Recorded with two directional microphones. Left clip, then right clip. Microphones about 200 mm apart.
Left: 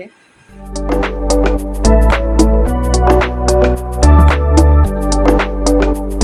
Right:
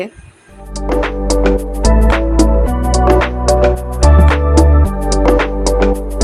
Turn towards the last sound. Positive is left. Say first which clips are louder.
# even
turn(degrees=0)  # may be behind; listen again after turning